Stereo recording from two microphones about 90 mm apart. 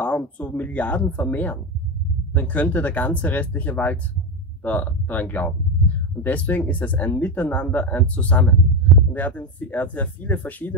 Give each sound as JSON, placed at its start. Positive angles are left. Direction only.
{"t": 0.0, "sound": "speech", "side_deg": 15}